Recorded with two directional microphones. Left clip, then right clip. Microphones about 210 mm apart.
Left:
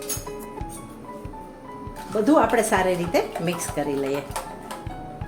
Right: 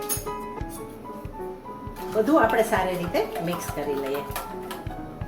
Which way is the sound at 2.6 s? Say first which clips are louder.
Left 3 dB; 50° left (ahead or behind).